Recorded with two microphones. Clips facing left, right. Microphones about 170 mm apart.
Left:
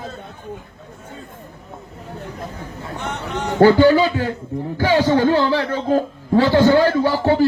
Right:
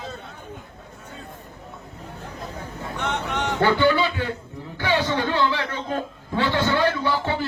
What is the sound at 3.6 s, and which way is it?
A man's voice, 40° left (ahead or behind).